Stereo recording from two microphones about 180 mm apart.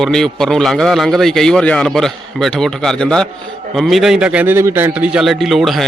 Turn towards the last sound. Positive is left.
turn(degrees=0)  # may be behind; listen again after turning